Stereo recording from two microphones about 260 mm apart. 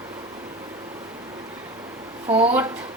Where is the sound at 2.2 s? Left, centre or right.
Right.